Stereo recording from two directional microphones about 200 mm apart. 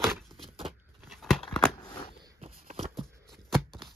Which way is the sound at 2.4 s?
35° right (ahead or behind).